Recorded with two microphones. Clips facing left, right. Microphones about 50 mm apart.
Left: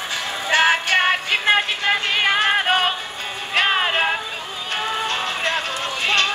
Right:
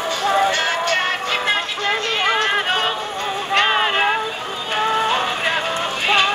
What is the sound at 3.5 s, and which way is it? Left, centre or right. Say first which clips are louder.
Music: right 1 dB; centre.